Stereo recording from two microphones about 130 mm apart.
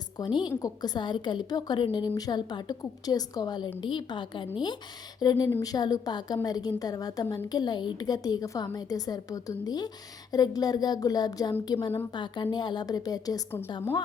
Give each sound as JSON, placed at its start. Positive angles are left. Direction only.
{"t": 0.2, "sound": "a woman's voice", "side_deg": 35}